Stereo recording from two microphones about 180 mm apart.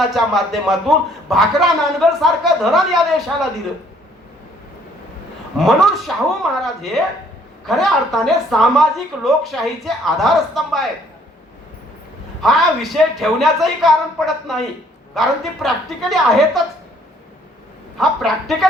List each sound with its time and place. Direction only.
0.0 s a woman's voice: centre (ahead or behind)
5.5 s a woman's voice: centre (ahead or behind)
12.4 s a woman's voice: centre (ahead or behind)
17.9 s a woman's voice: centre (ahead or behind)